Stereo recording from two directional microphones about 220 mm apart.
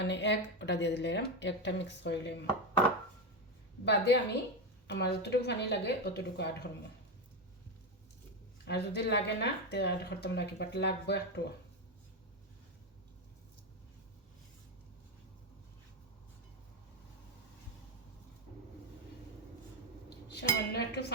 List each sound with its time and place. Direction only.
0.0 s a woman's voice: 50° left (ahead or behind)
3.8 s a woman's voice: 50° left (ahead or behind)
8.6 s a woman's voice: 50° left (ahead or behind)
20.3 s a woman's voice: 50° left (ahead or behind)